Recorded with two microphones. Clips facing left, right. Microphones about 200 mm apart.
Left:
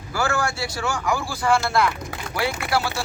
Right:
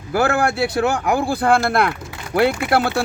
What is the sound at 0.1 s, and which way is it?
Speech, 60° right (ahead or behind).